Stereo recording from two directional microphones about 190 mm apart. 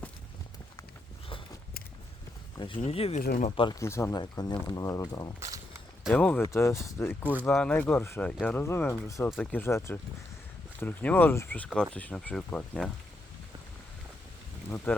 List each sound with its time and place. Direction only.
2.8 s speech: 30° left (ahead or behind)
3.2 s speech: 45° left (ahead or behind)
3.5 s speech: 25° left (ahead or behind)
3.8 s speech: 15° left (ahead or behind)
6.1 s speech: 5° left (ahead or behind)
14.9 s speech: 10° left (ahead or behind)